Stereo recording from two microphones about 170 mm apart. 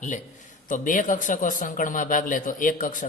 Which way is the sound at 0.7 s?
50° left (ahead or behind).